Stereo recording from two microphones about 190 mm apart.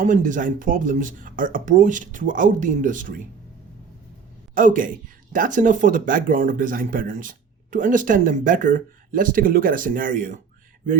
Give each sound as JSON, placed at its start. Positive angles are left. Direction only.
{"t": 0.0, "sound": "speech", "side_deg": -40}
{"t": 4.5, "sound": "speech", "side_deg": -45}